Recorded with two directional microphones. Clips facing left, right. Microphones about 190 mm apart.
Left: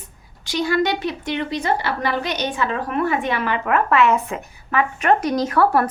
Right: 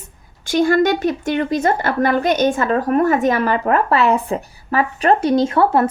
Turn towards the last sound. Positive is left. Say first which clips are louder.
# right 3 dB
turn(degrees=-25)  # may be behind; listen again after turning